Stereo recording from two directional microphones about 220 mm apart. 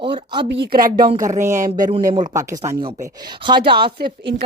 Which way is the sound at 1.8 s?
30° right (ahead or behind).